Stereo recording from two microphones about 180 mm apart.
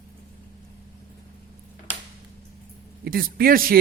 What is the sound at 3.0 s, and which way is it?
Speech, 55° right (ahead or behind).